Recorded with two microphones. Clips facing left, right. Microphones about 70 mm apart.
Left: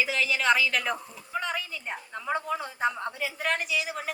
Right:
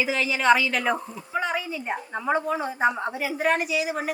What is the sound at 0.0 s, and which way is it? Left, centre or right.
A woman's voice, centre.